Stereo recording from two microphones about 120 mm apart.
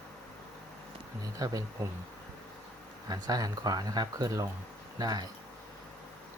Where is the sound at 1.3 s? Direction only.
30° right (ahead or behind).